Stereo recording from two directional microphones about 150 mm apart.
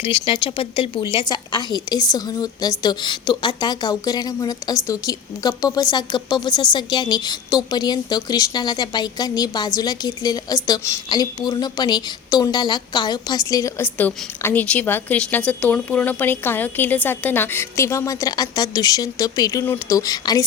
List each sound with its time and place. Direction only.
0.0 s a woman's voice: 35° left (ahead or behind)